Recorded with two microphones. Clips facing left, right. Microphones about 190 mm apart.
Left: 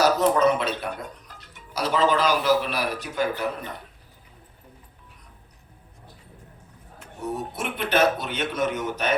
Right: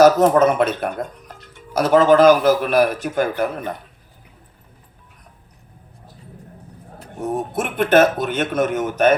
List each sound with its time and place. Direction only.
0.0 s speech: 50° right (ahead or behind)
7.0 s speech: 50° right (ahead or behind)